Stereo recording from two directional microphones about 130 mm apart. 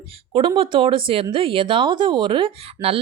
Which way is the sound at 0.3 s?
45° right (ahead or behind).